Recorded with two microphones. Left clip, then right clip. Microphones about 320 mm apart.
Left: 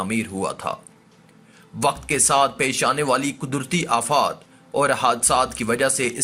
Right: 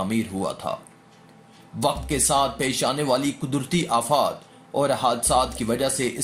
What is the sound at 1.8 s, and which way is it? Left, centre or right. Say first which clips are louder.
Speech: left 3 dB; left.